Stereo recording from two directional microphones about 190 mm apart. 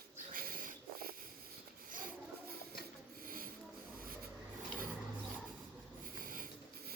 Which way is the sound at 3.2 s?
50° right (ahead or behind).